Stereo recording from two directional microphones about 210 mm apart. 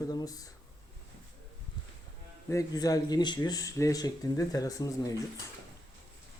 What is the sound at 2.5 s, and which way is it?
Speech, 15° left (ahead or behind).